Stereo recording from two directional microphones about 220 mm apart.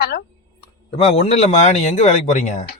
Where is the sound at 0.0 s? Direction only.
45° left (ahead or behind).